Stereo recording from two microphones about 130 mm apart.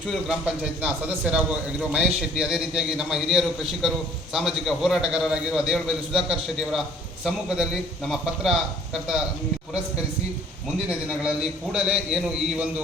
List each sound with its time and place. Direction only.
0.1 s a man's voice: 5° right (ahead or behind)
10.8 s a man's voice: 10° right (ahead or behind)